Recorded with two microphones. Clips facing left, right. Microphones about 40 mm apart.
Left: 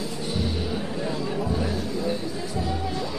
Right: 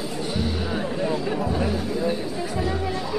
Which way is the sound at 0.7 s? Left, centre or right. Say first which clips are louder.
Right 4 dB; right.